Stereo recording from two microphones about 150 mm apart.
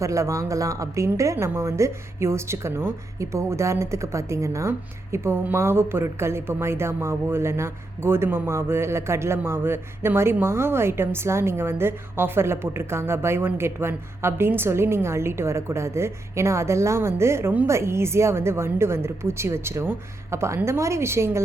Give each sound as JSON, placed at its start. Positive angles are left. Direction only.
{"t": 0.0, "sound": "a woman's voice", "side_deg": -20}